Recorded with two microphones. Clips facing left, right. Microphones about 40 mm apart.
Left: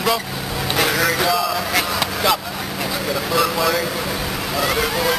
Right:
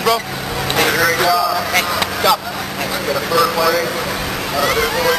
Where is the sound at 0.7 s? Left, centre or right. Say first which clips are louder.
Right 3 dB; centre.